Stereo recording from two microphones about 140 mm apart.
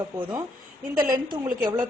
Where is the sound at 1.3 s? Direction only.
35° right (ahead or behind).